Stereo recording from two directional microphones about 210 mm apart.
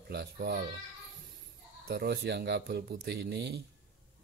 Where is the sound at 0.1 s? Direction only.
50° right (ahead or behind).